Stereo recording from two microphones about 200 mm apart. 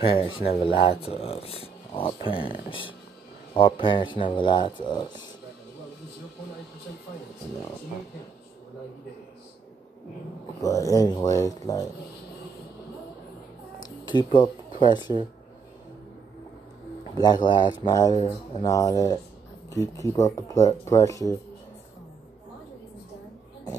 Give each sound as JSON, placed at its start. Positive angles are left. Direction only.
{"t": 0.0, "sound": "speech", "side_deg": 25}
{"t": 10.6, "sound": "speech", "side_deg": 15}
{"t": 13.8, "sound": "a sound", "side_deg": 25}
{"t": 14.8, "sound": "speech", "side_deg": 20}
{"t": 17.1, "sound": "speech", "side_deg": 20}